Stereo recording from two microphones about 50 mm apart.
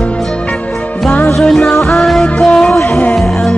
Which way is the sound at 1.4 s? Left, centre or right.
Centre.